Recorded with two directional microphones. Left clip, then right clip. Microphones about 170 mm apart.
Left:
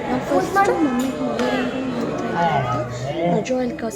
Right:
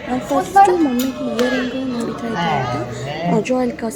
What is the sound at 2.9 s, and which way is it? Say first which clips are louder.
A woman's voice: right 2 dB; 20° right (ahead or behind).